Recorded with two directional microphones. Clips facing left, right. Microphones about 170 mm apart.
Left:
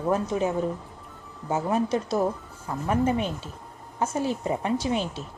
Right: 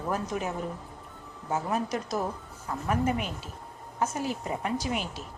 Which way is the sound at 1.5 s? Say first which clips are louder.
Left 5 dB; 30° left (ahead or behind).